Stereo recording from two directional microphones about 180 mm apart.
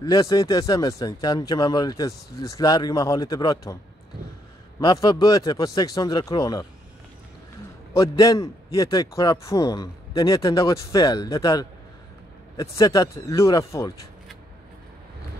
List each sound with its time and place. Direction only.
0.0 s speech: 20° left (ahead or behind)
4.7 s speech: 20° left (ahead or behind)
7.9 s speech: 20° left (ahead or behind)